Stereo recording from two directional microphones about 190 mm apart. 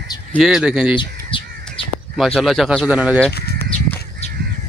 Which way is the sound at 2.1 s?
Centre (ahead or behind).